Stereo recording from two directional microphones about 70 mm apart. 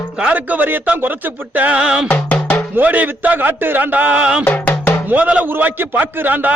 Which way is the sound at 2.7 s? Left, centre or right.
Right.